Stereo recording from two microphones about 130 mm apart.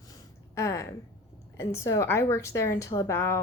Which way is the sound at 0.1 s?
25° left (ahead or behind).